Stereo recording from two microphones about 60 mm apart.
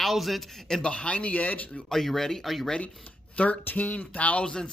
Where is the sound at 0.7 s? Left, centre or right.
Centre.